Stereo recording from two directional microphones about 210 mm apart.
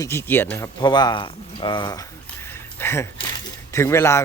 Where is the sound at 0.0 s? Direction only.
10° left (ahead or behind).